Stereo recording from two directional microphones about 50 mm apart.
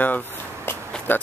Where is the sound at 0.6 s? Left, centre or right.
Left.